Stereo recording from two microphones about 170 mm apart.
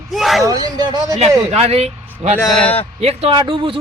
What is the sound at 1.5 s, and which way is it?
Speech, 35° right (ahead or behind).